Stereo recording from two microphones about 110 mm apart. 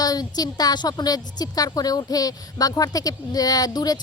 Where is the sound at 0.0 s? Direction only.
35° left (ahead or behind).